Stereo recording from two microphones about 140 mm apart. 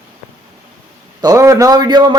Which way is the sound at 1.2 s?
25° right (ahead or behind).